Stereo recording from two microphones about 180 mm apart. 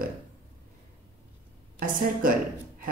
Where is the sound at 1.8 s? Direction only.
50° right (ahead or behind).